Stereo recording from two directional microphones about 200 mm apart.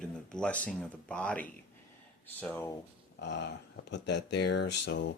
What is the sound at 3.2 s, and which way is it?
Speech, 60° left (ahead or behind).